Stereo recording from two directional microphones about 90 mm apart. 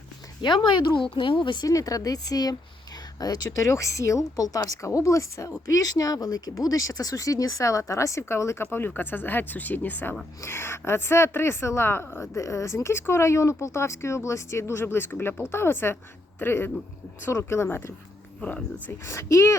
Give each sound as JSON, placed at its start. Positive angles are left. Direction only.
{"t": 0.4, "sound": "speech", "side_deg": 60}
{"t": 1.6, "sound": "speech", "side_deg": 40}
{"t": 19.0, "sound": "speech", "side_deg": 35}